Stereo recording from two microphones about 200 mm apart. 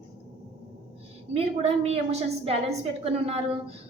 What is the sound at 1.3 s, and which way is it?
A woman's voice, 30° right (ahead or behind).